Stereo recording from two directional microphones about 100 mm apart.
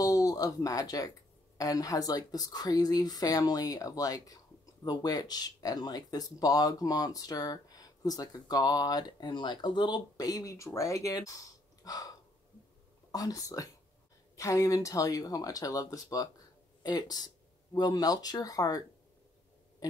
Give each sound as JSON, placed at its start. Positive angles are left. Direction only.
{"t": 0.0, "sound": "speech", "side_deg": 35}
{"t": 10.1, "sound": "speech", "side_deg": 35}
{"t": 13.1, "sound": "speech", "side_deg": 35}
{"t": 19.8, "sound": "music", "side_deg": 40}